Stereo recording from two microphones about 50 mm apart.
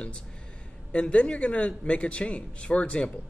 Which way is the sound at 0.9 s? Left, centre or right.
Left.